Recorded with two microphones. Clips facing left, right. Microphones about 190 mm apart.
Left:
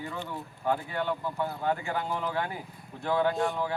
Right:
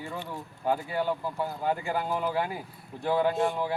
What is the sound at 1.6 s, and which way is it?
Speech, 10° right (ahead or behind).